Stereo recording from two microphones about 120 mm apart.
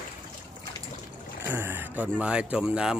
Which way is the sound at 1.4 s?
20° right (ahead or behind).